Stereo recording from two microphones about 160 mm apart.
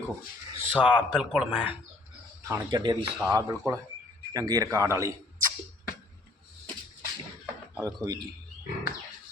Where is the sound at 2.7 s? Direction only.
25° right (ahead or behind).